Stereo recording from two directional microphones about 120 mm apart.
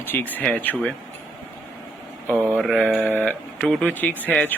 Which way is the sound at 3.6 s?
5° left (ahead or behind).